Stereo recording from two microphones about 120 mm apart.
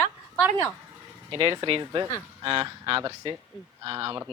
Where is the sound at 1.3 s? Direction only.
45° right (ahead or behind).